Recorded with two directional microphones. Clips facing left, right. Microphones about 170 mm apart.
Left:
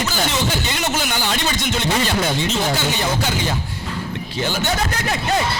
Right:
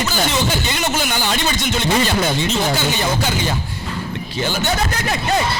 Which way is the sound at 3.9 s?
25° right (ahead or behind).